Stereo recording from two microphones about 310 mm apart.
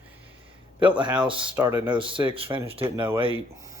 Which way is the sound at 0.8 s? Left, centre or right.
Centre.